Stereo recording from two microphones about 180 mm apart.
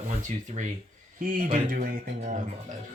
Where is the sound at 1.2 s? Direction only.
50° right (ahead or behind).